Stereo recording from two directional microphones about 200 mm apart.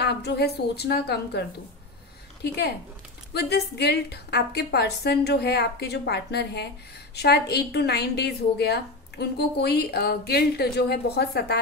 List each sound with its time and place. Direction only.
0.0 s a woman's voice: 55° left (ahead or behind)
2.4 s a woman's voice: 55° left (ahead or behind)